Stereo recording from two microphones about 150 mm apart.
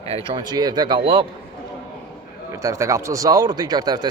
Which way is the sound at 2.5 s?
20° right (ahead or behind).